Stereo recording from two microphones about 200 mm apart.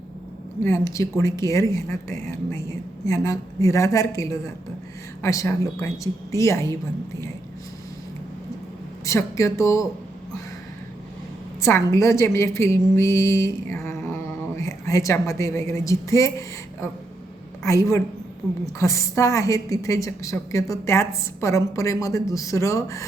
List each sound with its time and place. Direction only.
0.6 s a woman's voice: 15° left (ahead or behind)
9.0 s a woman's voice: 15° left (ahead or behind)
11.6 s a woman's voice: 15° left (ahead or behind)
17.6 s a woman's voice: 15° left (ahead or behind)